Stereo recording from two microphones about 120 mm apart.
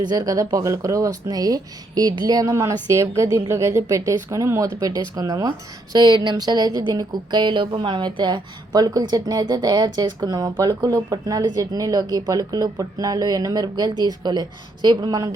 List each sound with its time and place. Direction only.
0.0 s a woman's voice: 35° right (ahead or behind)